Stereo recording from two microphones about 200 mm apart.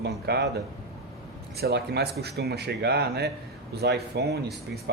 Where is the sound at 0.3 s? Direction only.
55° right (ahead or behind).